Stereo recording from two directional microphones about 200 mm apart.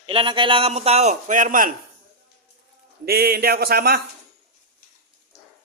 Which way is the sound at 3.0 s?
50° right (ahead or behind).